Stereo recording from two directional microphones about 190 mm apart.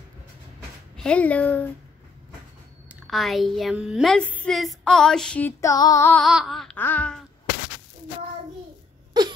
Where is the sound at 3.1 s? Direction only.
Centre (ahead or behind); by 6.1 s 15° left (ahead or behind).